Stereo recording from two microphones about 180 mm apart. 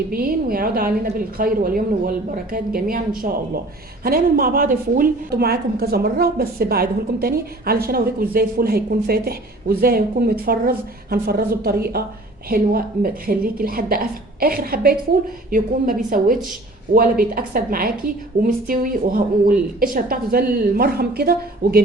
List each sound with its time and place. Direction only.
0.1 s a woman's voice: 55° right (ahead or behind)